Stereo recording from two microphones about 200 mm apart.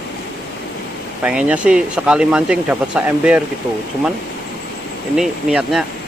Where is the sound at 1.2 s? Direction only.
5° right (ahead or behind).